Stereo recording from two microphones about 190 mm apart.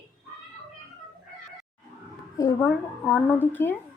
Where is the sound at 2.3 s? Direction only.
15° left (ahead or behind).